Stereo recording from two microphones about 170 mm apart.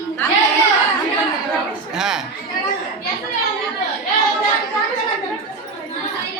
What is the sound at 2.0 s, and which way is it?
Speech, 5° right (ahead or behind).